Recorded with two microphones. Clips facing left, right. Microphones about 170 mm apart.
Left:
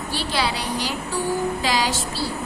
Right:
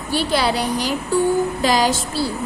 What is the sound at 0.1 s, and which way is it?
A woman's voice, 45° right (ahead or behind).